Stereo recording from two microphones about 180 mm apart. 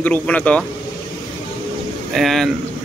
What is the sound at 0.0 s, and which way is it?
Speech, 10° left (ahead or behind).